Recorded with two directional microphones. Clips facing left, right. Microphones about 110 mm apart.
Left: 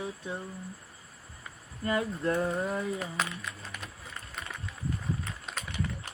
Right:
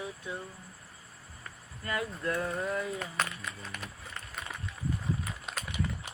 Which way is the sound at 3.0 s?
Centre (ahead or behind).